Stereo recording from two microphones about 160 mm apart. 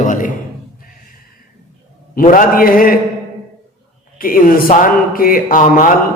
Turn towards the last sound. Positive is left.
turn(degrees=60)  # may be behind; listen again after turning